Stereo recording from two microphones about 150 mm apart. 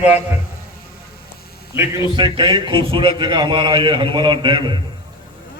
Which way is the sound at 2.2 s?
30° right (ahead or behind).